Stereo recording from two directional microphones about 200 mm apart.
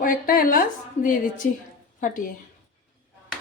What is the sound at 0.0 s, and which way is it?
A woman's voice, 45° left (ahead or behind).